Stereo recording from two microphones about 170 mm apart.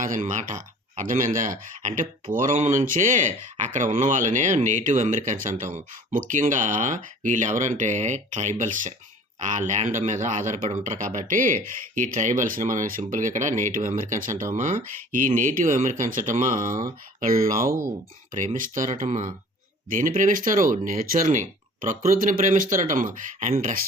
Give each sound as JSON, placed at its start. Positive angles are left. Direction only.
{"t": 0.0, "sound": "speech", "side_deg": -50}